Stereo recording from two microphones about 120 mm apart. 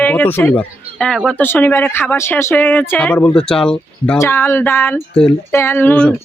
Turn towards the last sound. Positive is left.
turn(degrees=10)  # may be behind; listen again after turning